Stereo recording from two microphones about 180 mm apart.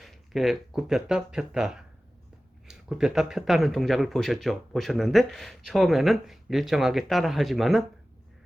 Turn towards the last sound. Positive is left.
turn(degrees=0)  # may be behind; listen again after turning